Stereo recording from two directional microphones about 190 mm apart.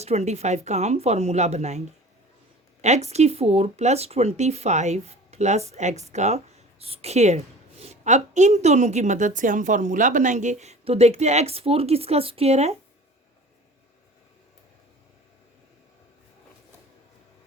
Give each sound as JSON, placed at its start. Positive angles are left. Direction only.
{"t": 0.0, "sound": "speech", "side_deg": -35}
{"t": 2.8, "sound": "speech", "side_deg": -35}